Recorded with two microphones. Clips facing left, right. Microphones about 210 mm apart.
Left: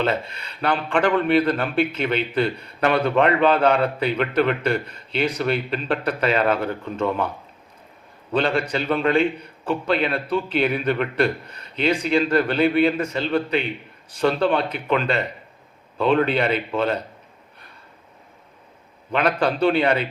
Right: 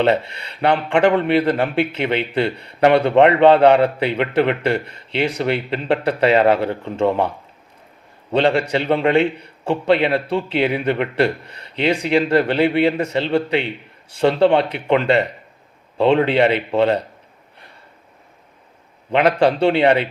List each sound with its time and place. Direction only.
0.0 s speech: 25° right (ahead or behind)
8.3 s a man's voice: 25° right (ahead or behind)
19.1 s speech: 25° right (ahead or behind)